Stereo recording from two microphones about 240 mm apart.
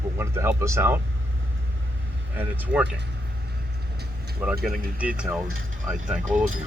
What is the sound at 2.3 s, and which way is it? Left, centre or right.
Speech, centre.